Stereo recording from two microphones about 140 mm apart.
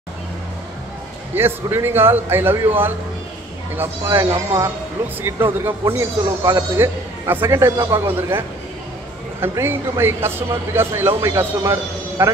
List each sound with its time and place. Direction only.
1.3 s a man's voice: 15° right (ahead or behind)